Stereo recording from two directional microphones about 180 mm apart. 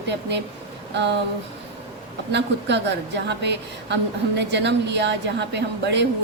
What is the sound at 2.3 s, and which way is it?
A woman's voice, 75° right (ahead or behind).